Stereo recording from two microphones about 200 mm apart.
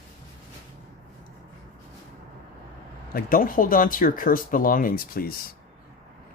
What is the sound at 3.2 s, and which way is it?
Speech, 45° left (ahead or behind).